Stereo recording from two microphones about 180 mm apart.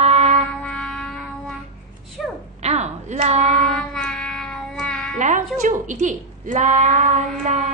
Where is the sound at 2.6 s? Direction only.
40° right (ahead or behind).